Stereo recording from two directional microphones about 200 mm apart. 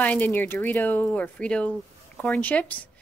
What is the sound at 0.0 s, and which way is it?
Speech, 5° left (ahead or behind).